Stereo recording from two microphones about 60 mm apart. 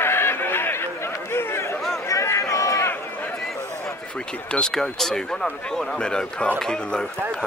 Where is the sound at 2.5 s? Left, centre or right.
Left.